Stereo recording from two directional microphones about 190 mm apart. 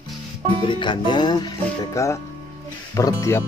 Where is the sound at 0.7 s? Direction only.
25° left (ahead or behind).